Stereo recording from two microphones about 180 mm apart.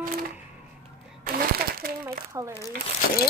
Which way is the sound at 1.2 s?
55° right (ahead or behind).